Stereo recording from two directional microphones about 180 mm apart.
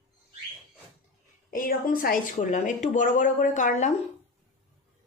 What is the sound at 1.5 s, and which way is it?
A woman's voice, 50° left (ahead or behind).